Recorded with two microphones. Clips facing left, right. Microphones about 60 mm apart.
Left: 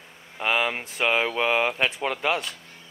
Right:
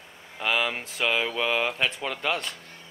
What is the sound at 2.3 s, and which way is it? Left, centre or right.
Speech, centre.